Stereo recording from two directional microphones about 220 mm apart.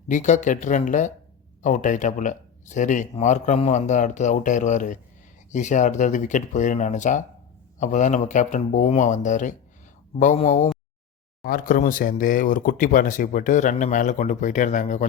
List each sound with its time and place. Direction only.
0.1 s speech: 35° left (ahead or behind)